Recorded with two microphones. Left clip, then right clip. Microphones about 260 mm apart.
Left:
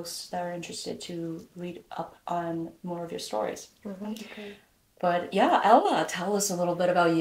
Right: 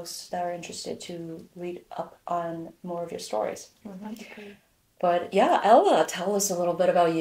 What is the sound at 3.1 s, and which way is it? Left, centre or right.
Speech, right.